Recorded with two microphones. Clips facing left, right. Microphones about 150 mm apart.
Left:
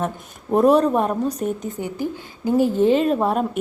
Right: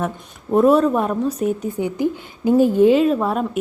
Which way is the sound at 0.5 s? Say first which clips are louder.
Right 1 dB; centre (ahead or behind).